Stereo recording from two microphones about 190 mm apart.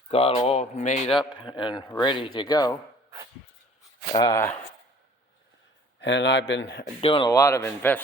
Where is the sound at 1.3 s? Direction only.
25° left (ahead or behind).